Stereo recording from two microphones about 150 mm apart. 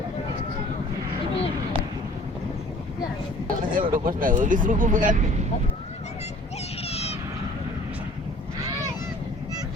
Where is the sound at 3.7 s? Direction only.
65° right (ahead or behind).